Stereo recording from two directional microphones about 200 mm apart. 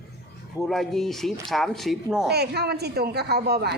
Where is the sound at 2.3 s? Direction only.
55° right (ahead or behind).